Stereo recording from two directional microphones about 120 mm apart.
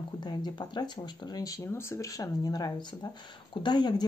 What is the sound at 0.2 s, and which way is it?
Speech, 35° left (ahead or behind).